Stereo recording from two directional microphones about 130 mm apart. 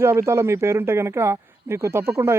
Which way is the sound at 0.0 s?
20° right (ahead or behind).